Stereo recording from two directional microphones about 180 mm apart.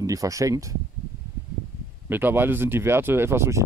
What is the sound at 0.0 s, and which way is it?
Speech, 20° right (ahead or behind).